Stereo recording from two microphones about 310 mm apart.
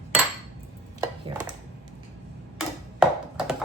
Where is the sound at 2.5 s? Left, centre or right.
Centre.